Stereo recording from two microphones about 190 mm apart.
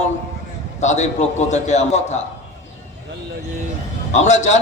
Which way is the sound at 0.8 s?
40° left (ahead or behind).